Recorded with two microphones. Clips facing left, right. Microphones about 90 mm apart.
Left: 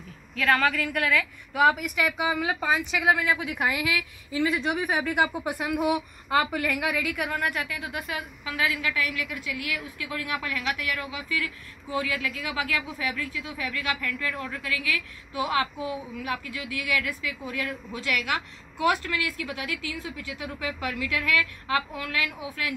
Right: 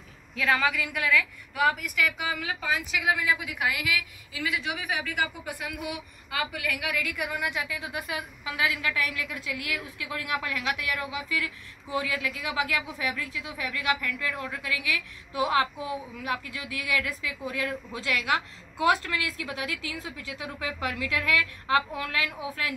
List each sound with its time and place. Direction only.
0.4 s a woman's voice: 10° right (ahead or behind)
1.1 s a woman's voice: 5° left (ahead or behind)
2.0 s a woman's voice: 20° left (ahead or behind)
2.6 s a woman's voice: 30° left (ahead or behind)
5.2 s a woman's voice: 55° left (ahead or behind)
6.9 s a woman's voice: 10° left (ahead or behind)
7.2 s a woman's voice: 15° right (ahead or behind); by 22.8 s 30° right (ahead or behind)